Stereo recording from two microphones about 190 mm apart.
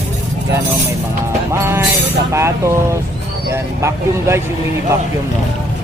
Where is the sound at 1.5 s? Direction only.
15° right (ahead or behind).